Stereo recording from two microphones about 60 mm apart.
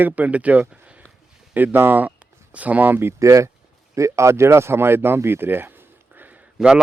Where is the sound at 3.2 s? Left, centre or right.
Right.